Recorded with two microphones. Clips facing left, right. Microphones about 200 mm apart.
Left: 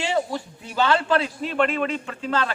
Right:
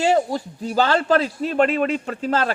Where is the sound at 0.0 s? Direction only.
40° right (ahead or behind).